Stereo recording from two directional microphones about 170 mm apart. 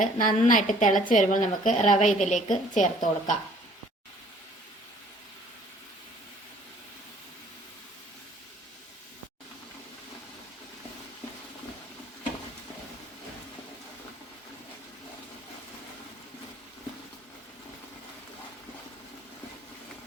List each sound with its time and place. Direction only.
0.0 s a woman's voice: 50° left (ahead or behind)